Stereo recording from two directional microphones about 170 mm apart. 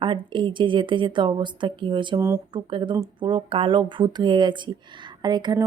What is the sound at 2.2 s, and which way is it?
Speech, 15° right (ahead or behind).